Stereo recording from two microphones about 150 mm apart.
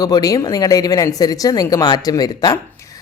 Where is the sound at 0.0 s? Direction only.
25° left (ahead or behind).